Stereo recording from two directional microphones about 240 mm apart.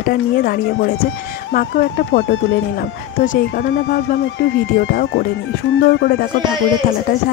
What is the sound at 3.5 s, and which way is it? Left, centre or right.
Speech, left.